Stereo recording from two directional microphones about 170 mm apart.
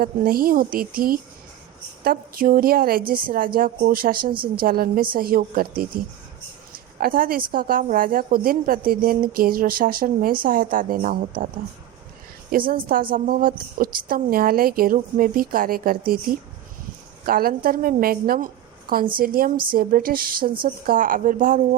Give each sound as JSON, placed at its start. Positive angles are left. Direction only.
{"t": 0.0, "sound": "a woman's voice", "side_deg": -60}